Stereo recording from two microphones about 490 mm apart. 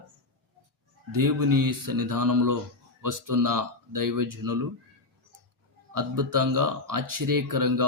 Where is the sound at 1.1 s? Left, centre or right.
Right.